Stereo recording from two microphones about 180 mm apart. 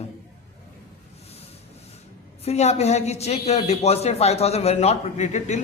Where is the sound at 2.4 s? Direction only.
35° left (ahead or behind).